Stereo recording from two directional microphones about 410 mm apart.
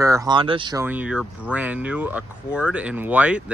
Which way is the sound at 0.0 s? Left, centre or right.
Centre.